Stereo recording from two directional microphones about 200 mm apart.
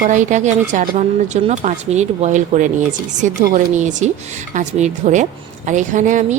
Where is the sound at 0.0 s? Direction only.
40° right (ahead or behind).